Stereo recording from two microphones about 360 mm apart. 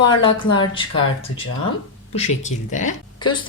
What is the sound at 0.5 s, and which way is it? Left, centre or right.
Speech, centre.